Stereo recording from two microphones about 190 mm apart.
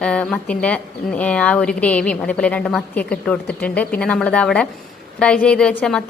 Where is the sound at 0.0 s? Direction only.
5° left (ahead or behind).